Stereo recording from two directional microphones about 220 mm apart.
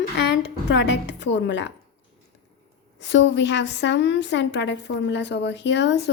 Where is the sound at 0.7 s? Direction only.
55° left (ahead or behind).